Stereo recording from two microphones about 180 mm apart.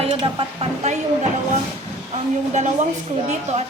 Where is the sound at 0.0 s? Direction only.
30° right (ahead or behind).